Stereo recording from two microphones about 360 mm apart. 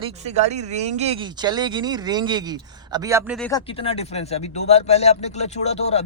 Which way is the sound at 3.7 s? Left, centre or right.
Centre.